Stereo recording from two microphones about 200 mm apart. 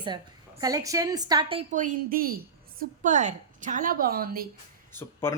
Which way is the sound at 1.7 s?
40° right (ahead or behind).